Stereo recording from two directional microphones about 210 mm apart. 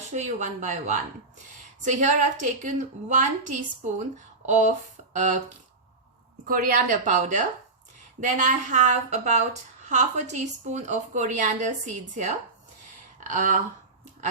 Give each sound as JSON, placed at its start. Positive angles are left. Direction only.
{"t": 0.1, "sound": "a woman's voice", "side_deg": -35}
{"t": 5.1, "sound": "a woman's voice", "side_deg": -35}
{"t": 6.5, "sound": "a woman's voice", "side_deg": -40}